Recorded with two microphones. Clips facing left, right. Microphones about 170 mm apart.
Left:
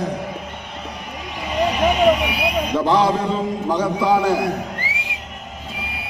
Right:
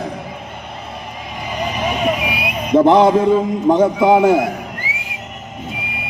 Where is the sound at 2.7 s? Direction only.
25° right (ahead or behind).